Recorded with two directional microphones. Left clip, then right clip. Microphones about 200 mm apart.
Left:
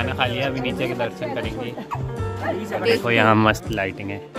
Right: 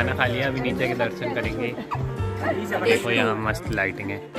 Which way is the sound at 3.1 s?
55° left (ahead or behind).